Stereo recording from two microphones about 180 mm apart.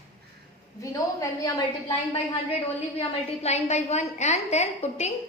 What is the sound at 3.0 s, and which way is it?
A woman's voice, 35° left (ahead or behind).